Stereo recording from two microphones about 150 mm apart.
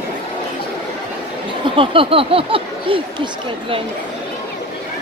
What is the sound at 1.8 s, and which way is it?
Speech, 35° right (ahead or behind).